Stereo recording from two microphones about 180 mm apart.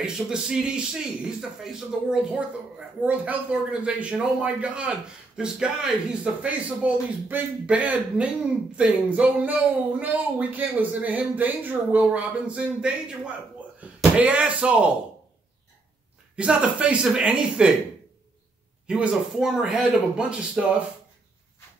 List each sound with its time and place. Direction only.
0.0 s a man's voice: 5° right (ahead or behind)
16.3 s a man's voice: 5° right (ahead or behind)
18.9 s a man's voice: 5° right (ahead or behind)